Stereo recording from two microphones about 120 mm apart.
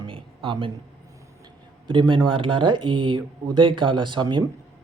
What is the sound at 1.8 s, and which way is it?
Speech, 45° right (ahead or behind).